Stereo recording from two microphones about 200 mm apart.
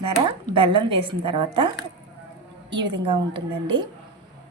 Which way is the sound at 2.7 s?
25° right (ahead or behind).